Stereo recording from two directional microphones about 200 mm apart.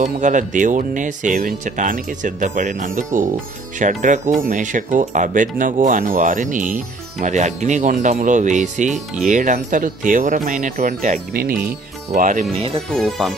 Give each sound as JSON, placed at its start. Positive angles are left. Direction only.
{"t": 0.0, "sound": "speech", "side_deg": -40}
{"t": 12.9, "sound": "speech", "side_deg": 0}